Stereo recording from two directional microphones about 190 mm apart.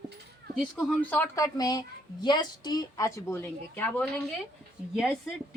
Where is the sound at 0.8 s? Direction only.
10° left (ahead or behind).